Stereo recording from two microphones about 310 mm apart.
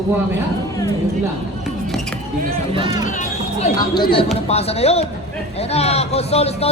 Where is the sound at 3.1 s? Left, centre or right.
Left.